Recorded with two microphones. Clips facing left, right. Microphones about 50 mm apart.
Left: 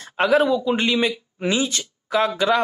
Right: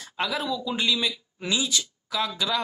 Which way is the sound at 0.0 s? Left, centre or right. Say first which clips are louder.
Left 11 dB; left.